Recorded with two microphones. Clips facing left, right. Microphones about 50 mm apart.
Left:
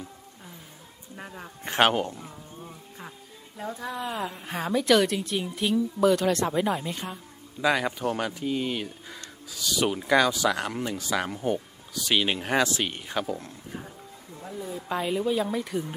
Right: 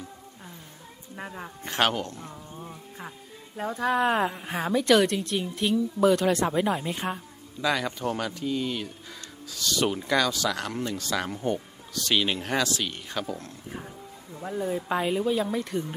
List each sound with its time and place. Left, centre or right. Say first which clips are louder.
1.1 s a sound: right 3 dB; centre
1.6 s speech: left 3 dB; centre
2.6 s music: right 2 dB; centre
3.8 s speech: right 11 dB; right
4.3 s a woman's voice: right 1 dB; centre
7.6 s speech: left 2 dB; centre
10.1 s speech: left 7 dB; centre
13.2 s a woman's voice: left 2 dB; centre
14.4 s a woman's voice: right 7 dB; right
14.8 s a woman's voice: left 2 dB; centre